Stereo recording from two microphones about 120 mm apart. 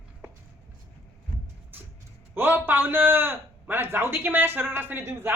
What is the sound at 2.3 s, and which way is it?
A man's voice, 20° right (ahead or behind).